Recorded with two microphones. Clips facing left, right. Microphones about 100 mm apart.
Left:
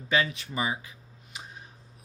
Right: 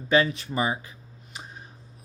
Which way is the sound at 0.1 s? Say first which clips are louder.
Right 5 dB; 35° right (ahead or behind).